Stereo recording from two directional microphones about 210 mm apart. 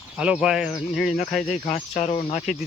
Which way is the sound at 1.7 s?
30° left (ahead or behind).